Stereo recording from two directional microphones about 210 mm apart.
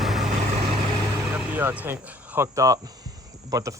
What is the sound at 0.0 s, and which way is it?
Vehicle, centre (ahead or behind).